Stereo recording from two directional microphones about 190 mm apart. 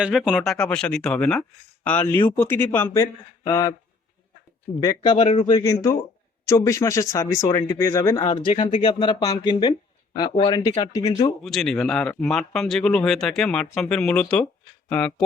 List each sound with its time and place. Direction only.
0.0 s speech: centre (ahead or behind); by 3.8 s 20° left (ahead or behind)
4.8 s speech: 20° left (ahead or behind)
5.1 s speech: 35° left (ahead or behind)
5.5 s speech: 20° left (ahead or behind)
11.4 s speech: centre (ahead or behind)